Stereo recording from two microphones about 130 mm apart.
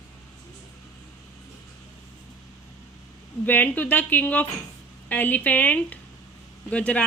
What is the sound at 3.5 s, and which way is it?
Speech, 15° left (ahead or behind).